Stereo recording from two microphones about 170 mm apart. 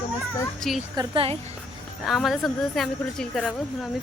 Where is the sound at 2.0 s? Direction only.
Centre (ahead or behind).